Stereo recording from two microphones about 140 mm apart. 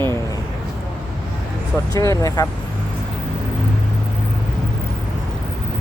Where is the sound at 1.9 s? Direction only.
25° left (ahead or behind).